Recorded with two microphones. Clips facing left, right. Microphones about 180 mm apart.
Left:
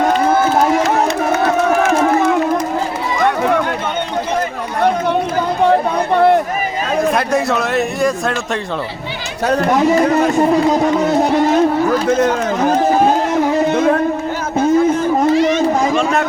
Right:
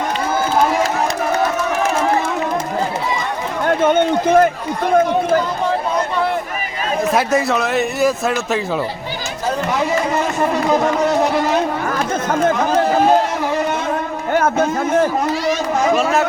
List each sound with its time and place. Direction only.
3.8 s run: 50° right (ahead or behind)
5.6 s chatter: 60° left (ahead or behind)
7.1 s a man's voice: centre (ahead or behind)